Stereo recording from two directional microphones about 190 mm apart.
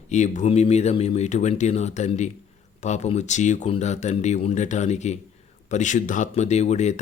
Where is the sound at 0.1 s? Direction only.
40° left (ahead or behind).